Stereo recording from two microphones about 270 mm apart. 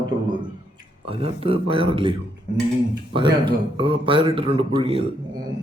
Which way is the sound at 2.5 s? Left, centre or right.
Right.